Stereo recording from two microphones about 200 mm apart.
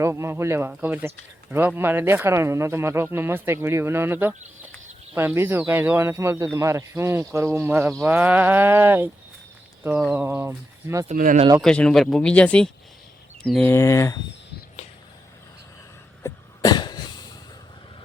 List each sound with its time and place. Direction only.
0.0 s speech: 15° right (ahead or behind)
11.1 s speech: 40° right (ahead or behind)
11.6 s speech: 5° left (ahead or behind)
16.2 s cough: 20° left (ahead or behind)